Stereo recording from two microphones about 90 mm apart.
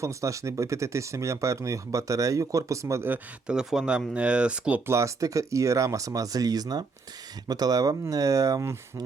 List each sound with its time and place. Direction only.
0.0 s speech: 35° right (ahead or behind)
3.4 s speech: 10° right (ahead or behind)
4.9 s speech: 35° right (ahead or behind)